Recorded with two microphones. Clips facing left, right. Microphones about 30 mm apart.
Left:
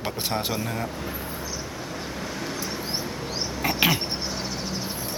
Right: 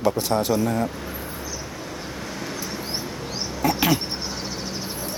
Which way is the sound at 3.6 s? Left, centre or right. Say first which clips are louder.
Right 2 dB; left.